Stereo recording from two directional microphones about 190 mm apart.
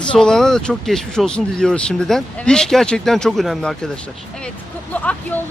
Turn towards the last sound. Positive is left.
turn(degrees=10)  # may be behind; listen again after turning